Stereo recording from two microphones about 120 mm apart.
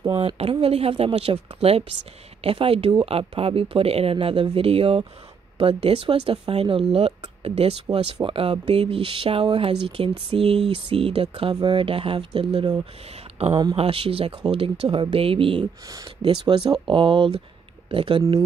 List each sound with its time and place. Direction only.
0.4 s a woman's voice: 55° right (ahead or behind)
13.5 s speech: 35° right (ahead or behind)
13.7 s speech: 50° right (ahead or behind)
15.9 s speech: 30° right (ahead or behind)
16.3 s speech: 45° right (ahead or behind)